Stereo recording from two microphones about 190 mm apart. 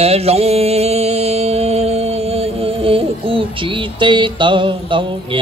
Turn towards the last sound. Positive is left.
turn(degrees=-25)  # may be behind; listen again after turning